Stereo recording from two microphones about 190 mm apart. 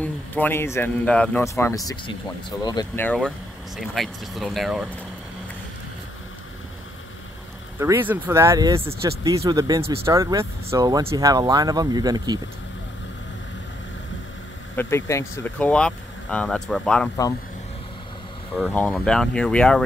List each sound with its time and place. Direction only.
0.0 s speech: 10° left (ahead or behind)
3.0 s speech: 5° left (ahead or behind)
7.8 s speech: 10° right (ahead or behind)
14.8 s speech: 15° left (ahead or behind)
18.6 s speech: 5° left (ahead or behind)